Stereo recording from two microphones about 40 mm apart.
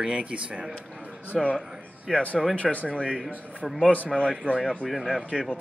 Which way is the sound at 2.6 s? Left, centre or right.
Left.